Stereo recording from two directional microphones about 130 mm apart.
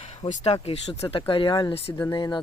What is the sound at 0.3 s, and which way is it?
Speech, 55° left (ahead or behind).